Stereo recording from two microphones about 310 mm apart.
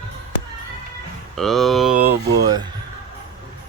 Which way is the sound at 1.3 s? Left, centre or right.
Centre.